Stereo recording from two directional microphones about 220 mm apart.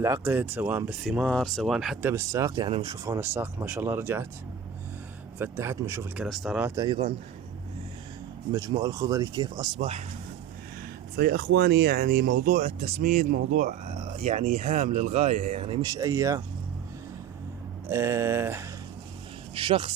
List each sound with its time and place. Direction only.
0.0 s speech: 10° right (ahead or behind)
5.4 s speech: 10° right (ahead or behind)
6.2 s speech: centre (ahead or behind); by 7.1 s 20° right (ahead or behind)
8.5 s speech: 15° right (ahead or behind)
11.2 s speech: 45° right (ahead or behind); by 16.4 s 15° right (ahead or behind)
17.8 s speech: 10° right (ahead or behind)
19.5 s speech: 25° right (ahead or behind)